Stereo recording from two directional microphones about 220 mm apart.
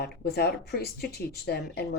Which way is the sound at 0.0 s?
45° left (ahead or behind).